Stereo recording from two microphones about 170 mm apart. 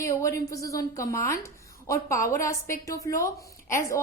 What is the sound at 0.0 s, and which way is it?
A woman's voice, 15° left (ahead or behind).